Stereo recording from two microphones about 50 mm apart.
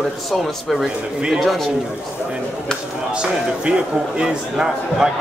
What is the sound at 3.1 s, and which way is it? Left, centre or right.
Speech, centre.